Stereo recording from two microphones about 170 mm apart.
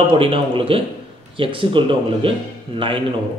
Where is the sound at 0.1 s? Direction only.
30° right (ahead or behind).